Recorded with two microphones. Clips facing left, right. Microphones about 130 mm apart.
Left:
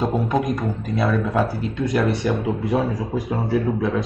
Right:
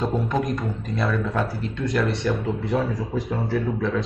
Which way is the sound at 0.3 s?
Centre (ahead or behind).